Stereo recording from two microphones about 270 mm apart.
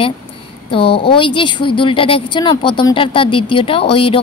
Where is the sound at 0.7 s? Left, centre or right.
Centre.